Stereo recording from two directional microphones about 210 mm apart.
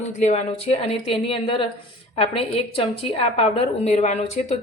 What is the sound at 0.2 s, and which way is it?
A woman's voice, 30° left (ahead or behind).